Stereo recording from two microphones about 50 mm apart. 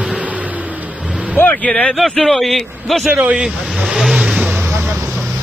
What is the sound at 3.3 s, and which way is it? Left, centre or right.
Vehicle, centre.